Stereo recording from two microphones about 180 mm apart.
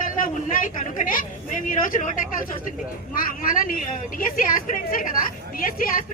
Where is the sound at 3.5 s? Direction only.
50° left (ahead or behind).